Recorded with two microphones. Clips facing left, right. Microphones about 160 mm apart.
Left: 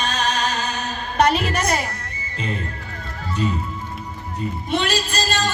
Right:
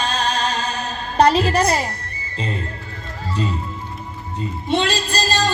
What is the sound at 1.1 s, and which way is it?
Music, 30° right (ahead or behind).